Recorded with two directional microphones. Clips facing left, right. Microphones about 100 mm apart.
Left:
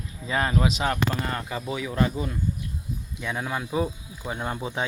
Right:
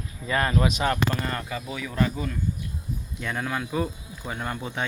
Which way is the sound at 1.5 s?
25° left (ahead or behind).